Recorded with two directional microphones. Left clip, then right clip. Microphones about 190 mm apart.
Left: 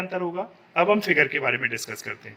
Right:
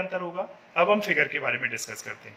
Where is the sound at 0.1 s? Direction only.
30° left (ahead or behind).